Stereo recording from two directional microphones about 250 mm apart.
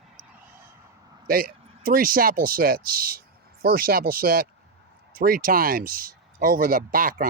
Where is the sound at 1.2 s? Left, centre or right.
Right.